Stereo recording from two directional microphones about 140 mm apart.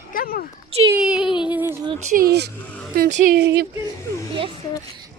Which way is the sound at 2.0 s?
75° right (ahead or behind).